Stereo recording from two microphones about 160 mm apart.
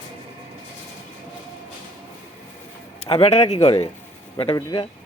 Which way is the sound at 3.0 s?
35° left (ahead or behind).